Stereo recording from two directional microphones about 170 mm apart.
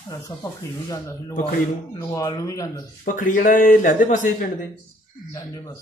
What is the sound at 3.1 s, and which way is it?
Speech, 50° left (ahead or behind).